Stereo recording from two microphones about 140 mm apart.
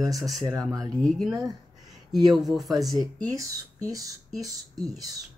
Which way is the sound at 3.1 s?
25° right (ahead or behind).